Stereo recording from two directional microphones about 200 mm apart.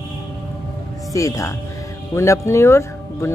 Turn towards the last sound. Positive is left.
turn(degrees=15)  # may be behind; listen again after turning